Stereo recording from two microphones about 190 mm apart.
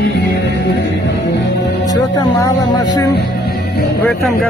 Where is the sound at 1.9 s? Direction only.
20° left (ahead or behind).